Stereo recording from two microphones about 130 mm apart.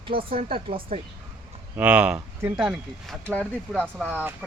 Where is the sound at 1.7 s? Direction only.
10° right (ahead or behind).